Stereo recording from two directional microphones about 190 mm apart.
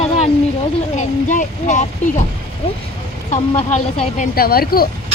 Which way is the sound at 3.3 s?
35° left (ahead or behind).